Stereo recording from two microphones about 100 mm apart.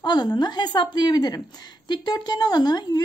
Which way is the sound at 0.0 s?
45° left (ahead or behind).